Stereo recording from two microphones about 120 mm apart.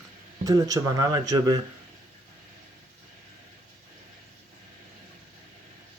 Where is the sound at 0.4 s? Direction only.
30° right (ahead or behind).